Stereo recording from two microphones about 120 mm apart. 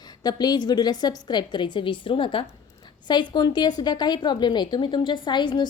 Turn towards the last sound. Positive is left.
turn(degrees=40)  # may be behind; listen again after turning